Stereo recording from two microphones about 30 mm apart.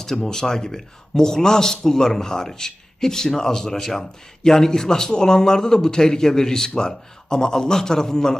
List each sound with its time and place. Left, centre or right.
0.2 s a man's voice: centre